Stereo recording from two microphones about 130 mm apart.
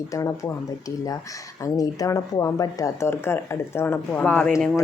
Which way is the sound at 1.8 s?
25° left (ahead or behind).